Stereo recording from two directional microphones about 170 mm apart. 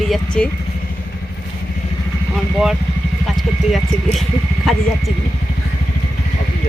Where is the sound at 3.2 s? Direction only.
Centre (ahead or behind).